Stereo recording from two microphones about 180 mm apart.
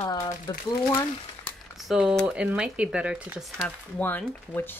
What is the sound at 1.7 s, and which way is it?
Speech, centre (ahead or behind).